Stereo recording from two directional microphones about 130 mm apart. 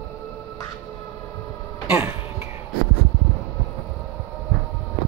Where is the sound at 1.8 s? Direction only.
15° right (ahead or behind).